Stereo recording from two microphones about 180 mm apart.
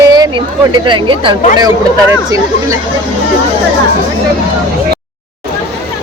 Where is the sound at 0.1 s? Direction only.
25° right (ahead or behind).